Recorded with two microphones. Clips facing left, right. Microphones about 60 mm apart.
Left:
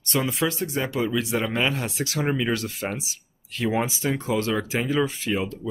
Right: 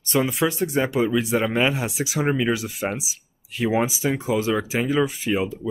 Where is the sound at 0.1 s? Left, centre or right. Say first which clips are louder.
Right 3 dB; centre.